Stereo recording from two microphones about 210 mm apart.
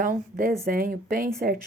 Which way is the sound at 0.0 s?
45° right (ahead or behind).